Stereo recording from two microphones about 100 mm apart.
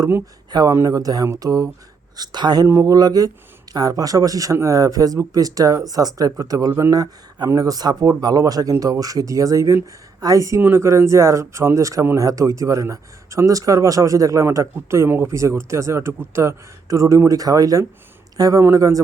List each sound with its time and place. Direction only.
0.5 s speech: 35° right (ahead or behind)
2.6 s speech: 30° right (ahead or behind)